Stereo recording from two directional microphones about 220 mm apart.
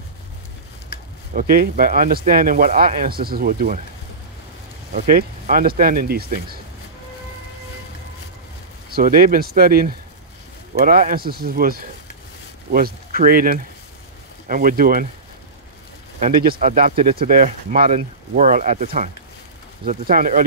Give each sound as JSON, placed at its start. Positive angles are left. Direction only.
{"t": 1.3, "sound": "speech", "side_deg": -40}
{"t": 4.9, "sound": "speech", "side_deg": -40}
{"t": 8.9, "sound": "speech", "side_deg": -40}
{"t": 16.2, "sound": "speech", "side_deg": -40}